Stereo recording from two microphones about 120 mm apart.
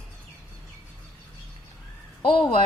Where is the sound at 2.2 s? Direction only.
45° left (ahead or behind).